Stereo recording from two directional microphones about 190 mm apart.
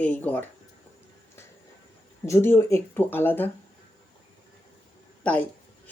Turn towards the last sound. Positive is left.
turn(degrees=5)  # may be behind; listen again after turning